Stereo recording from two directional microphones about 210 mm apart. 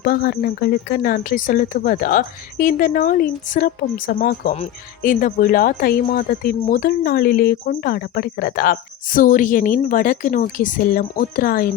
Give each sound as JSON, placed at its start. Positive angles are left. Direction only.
{"t": 0.0, "sound": "a woman's voice", "side_deg": 45}